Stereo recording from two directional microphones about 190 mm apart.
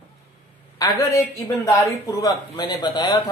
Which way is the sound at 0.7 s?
20° left (ahead or behind).